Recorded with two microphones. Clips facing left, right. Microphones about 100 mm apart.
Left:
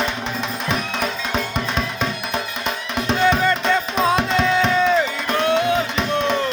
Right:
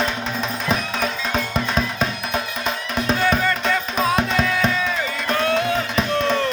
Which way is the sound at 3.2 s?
20° left (ahead or behind).